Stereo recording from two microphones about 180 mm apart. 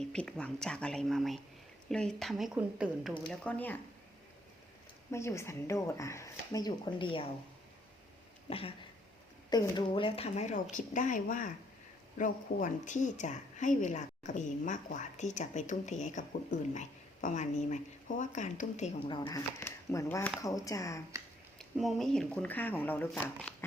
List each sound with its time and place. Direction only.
0.0 s speech: 5° left (ahead or behind)
5.1 s speech: 15° left (ahead or behind)
8.4 s a woman's voice: 30° left (ahead or behind)
19.0 s speech: 25° left (ahead or behind)
19.5 s speech: 15° left (ahead or behind)
21.6 s speech: centre (ahead or behind)